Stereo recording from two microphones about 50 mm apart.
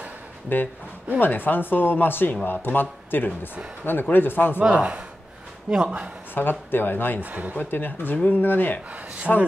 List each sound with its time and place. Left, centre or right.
0.5 s speech: left
4.6 s a man's voice: right
6.3 s speech: left
7.2 s speech: right
7.5 s speech: left
9.3 s speech: centre